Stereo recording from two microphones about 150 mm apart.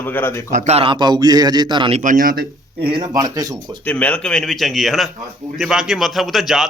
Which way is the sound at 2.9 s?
30° right (ahead or behind).